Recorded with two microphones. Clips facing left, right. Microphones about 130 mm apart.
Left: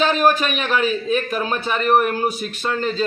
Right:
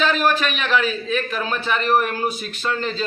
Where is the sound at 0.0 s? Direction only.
40° left (ahead or behind).